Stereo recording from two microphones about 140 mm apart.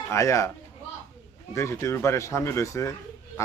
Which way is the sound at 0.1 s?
20° left (ahead or behind).